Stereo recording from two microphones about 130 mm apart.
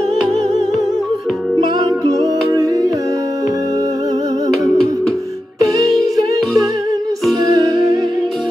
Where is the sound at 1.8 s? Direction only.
30° right (ahead or behind).